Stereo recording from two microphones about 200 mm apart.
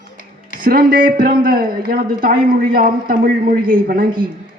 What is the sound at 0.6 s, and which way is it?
A woman's voice, 45° right (ahead or behind).